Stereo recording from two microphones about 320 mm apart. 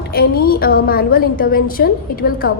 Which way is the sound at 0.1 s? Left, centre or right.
Left.